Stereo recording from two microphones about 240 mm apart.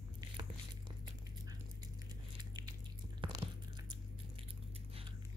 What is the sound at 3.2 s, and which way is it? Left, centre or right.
Biting, right.